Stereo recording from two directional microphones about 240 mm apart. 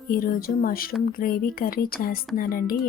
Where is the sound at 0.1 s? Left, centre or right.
Left.